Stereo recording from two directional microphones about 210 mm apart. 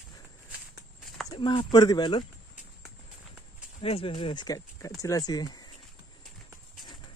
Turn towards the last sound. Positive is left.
turn(degrees=20)  # may be behind; listen again after turning